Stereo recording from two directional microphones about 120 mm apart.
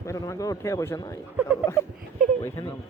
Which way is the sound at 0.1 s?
25° left (ahead or behind).